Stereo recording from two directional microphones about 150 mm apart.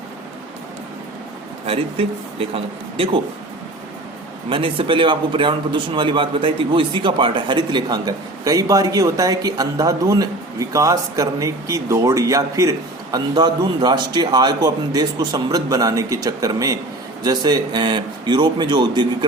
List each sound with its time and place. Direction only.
1.6 s speech: 40° right (ahead or behind)
4.4 s a man's voice: 35° right (ahead or behind)